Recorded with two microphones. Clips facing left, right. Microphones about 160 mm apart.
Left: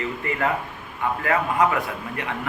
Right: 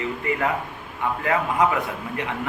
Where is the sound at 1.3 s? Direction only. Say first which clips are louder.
Even; 20° right (ahead or behind).